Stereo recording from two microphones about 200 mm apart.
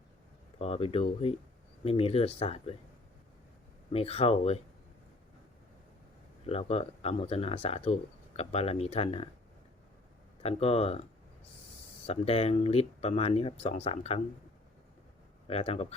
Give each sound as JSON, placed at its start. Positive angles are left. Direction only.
{"t": 0.6, "sound": "speech", "side_deg": 30}
{"t": 3.9, "sound": "speech", "side_deg": 30}
{"t": 6.4, "sound": "speech", "side_deg": 30}
{"t": 10.4, "sound": "speech", "side_deg": 30}
{"t": 12.0, "sound": "speech", "side_deg": 30}
{"t": 15.4, "sound": "speech", "side_deg": 30}